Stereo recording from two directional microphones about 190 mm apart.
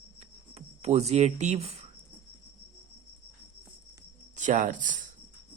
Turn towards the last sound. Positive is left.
turn(degrees=-45)  # may be behind; listen again after turning